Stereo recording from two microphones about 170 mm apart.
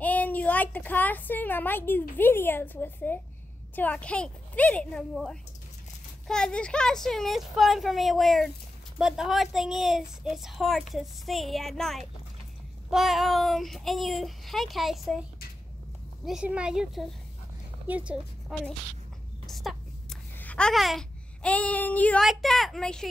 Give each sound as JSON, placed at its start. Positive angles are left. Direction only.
{"t": 0.0, "sound": "a woman's voice", "side_deg": 10}
{"t": 16.3, "sound": "a child's voice", "side_deg": -5}
{"t": 19.4, "sound": "a sound", "side_deg": 0}
{"t": 20.3, "sound": "a child's voice", "side_deg": 10}